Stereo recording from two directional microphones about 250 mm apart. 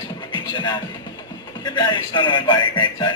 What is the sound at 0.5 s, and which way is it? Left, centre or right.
Music, centre.